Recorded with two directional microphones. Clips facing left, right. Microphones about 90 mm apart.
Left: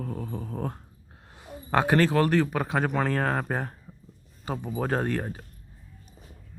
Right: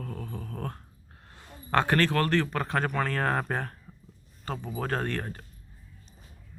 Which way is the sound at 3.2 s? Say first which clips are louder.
Left 1 dB; 5° left (ahead or behind).